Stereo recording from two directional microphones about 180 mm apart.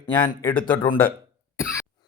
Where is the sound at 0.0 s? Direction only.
25° left (ahead or behind).